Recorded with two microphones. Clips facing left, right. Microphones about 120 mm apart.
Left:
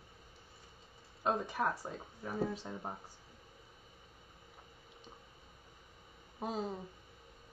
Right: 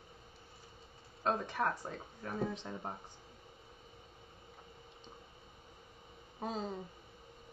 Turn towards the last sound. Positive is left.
turn(degrees=5)  # may be behind; listen again after turning